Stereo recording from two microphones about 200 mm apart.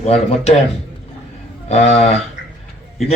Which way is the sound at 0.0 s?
30° left (ahead or behind).